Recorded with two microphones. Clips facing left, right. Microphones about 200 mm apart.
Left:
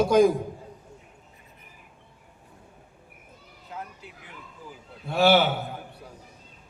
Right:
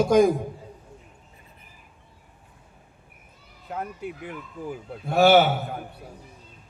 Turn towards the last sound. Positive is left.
turn(degrees=-50)  # may be behind; listen again after turning